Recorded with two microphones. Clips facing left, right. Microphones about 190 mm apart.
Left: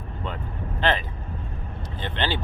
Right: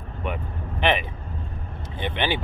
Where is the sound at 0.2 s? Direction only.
15° right (ahead or behind).